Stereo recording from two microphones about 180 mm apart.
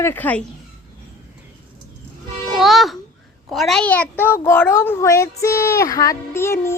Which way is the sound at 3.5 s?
Centre (ahead or behind).